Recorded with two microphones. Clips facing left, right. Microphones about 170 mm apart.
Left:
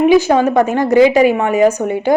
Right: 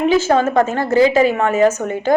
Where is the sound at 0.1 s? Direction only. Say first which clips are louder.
Left 4 dB; 15° left (ahead or behind).